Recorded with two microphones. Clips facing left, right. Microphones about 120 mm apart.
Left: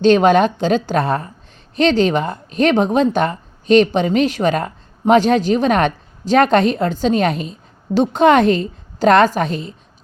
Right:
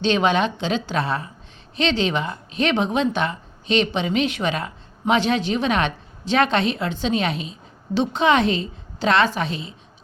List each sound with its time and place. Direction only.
0.0 s speech: 45° left (ahead or behind)